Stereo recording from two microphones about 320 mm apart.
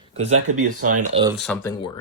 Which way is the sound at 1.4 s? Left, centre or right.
Centre.